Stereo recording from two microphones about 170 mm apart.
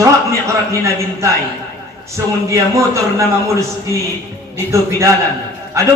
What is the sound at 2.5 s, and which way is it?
Speech, 15° right (ahead or behind).